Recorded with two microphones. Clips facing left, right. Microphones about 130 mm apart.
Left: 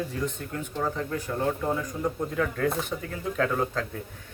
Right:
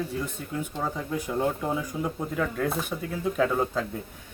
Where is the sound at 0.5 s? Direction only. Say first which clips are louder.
Right 1 dB; 10° right (ahead or behind).